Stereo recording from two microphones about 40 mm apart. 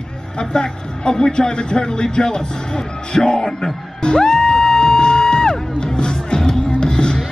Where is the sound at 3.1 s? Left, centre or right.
Centre.